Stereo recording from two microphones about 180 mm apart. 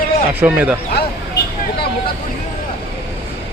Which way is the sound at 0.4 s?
5° right (ahead or behind).